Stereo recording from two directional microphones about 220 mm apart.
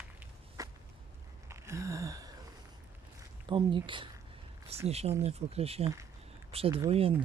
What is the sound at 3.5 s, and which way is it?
Speech, 20° right (ahead or behind).